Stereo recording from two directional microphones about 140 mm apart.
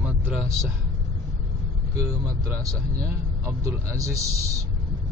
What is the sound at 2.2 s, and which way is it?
Speech, 25° right (ahead or behind).